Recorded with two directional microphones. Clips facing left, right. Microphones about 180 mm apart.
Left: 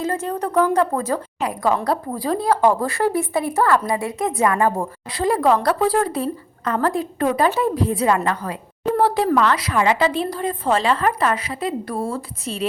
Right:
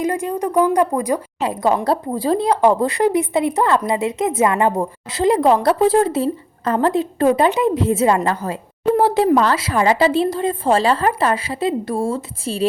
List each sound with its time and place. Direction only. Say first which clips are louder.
0.0 s a woman's voice: right 3 dB; 15° right (ahead or behind)
1.4 s speech: right 2 dB; 25° right (ahead or behind)